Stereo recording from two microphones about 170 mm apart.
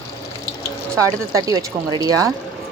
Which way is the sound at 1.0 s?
20° right (ahead or behind).